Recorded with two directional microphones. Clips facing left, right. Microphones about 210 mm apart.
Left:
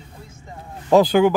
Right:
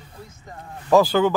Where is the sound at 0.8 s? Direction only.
20° left (ahead or behind).